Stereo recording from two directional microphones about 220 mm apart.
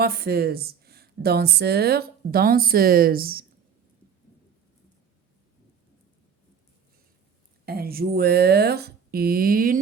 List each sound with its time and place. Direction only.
0.0 s a woman's voice: 45° right (ahead or behind)
7.6 s a woman's voice: 45° right (ahead or behind)